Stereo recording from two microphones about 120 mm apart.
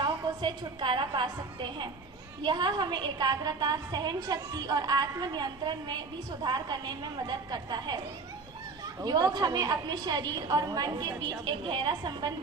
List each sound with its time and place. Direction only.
0.0 s a woman's voice: 40° right (ahead or behind)
9.0 s a woman's voice: 35° right (ahead or behind)